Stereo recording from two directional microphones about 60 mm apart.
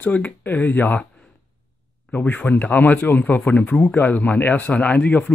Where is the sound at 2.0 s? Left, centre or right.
Left.